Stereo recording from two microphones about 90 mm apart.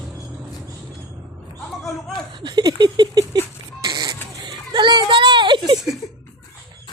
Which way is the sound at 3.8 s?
45° right (ahead or behind).